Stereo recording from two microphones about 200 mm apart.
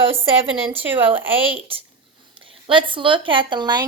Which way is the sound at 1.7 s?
25° right (ahead or behind).